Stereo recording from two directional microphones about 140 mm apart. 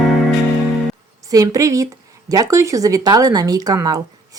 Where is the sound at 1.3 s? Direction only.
25° right (ahead or behind).